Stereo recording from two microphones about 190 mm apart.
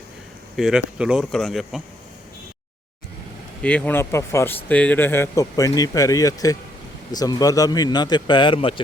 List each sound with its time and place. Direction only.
0.5 s speech: centre (ahead or behind)
3.6 s speech: 5° left (ahead or behind); by 8.8 s 25° left (ahead or behind)